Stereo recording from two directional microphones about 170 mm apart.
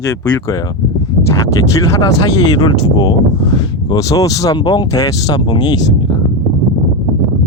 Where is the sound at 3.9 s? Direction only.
20° left (ahead or behind).